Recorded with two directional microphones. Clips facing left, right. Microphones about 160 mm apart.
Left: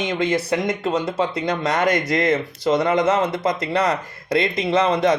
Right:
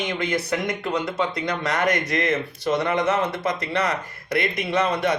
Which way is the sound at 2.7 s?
25° left (ahead or behind).